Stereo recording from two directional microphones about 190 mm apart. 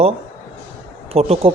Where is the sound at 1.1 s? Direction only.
30° right (ahead or behind).